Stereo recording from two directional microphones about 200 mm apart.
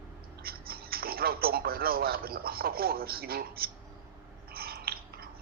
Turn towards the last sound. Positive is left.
turn(degrees=-50)  # may be behind; listen again after turning